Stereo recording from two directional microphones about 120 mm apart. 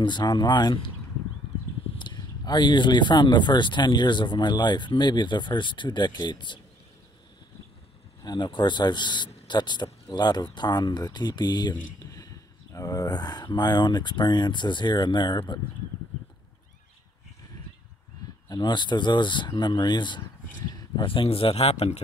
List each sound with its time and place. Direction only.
0.0 s speech: 40° left (ahead or behind)
2.0 s speech: 35° left (ahead or behind)
8.2 s speech: 35° left (ahead or behind)
18.5 s speech: 40° left (ahead or behind); by 22.0 s 60° left (ahead or behind)